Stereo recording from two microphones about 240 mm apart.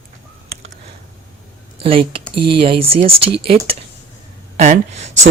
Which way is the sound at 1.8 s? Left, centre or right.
Right.